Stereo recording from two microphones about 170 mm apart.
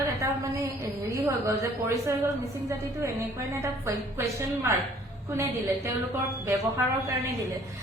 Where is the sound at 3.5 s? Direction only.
20° right (ahead or behind).